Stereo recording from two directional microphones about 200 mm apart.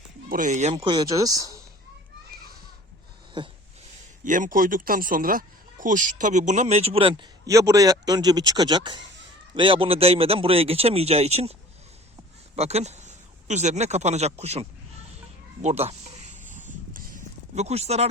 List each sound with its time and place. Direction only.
0.3 s speech: 40° right (ahead or behind)
0.7 s speech: 20° right (ahead or behind)
4.2 s a man's voice: 40° right (ahead or behind)
12.5 s speech: 30° right (ahead or behind)
15.6 s a sound: 30° right (ahead or behind)